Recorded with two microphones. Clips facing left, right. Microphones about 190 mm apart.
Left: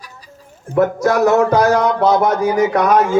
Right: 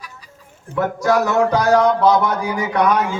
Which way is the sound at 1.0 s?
45° left (ahead or behind).